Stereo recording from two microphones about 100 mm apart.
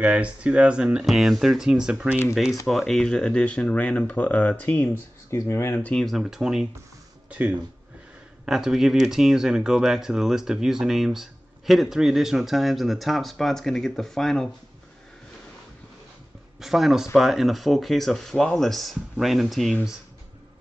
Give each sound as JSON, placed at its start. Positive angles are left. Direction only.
{"t": 0.0, "sound": "speech", "side_deg": -15}
{"t": 2.6, "sound": "speech", "side_deg": 0}
{"t": 5.3, "sound": "speech", "side_deg": 25}
{"t": 5.9, "sound": "speech", "side_deg": 5}
{"t": 7.2, "sound": "speech", "side_deg": -15}
{"t": 8.5, "sound": "speech", "side_deg": -5}
{"t": 16.5, "sound": "speech", "side_deg": 0}